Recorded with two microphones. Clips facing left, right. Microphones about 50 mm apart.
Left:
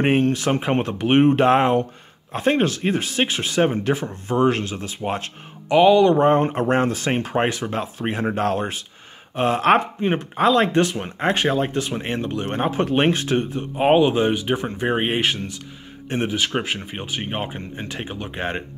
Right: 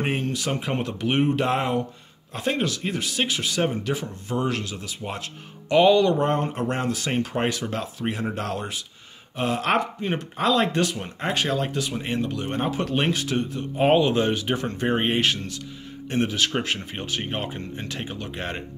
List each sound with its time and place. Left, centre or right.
0.0 s speech: left
5.7 s speech: centre
6.0 s speech: left
13.7 s speech: centre